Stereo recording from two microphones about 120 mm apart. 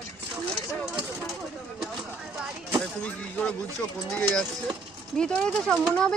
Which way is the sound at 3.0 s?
10° left (ahead or behind).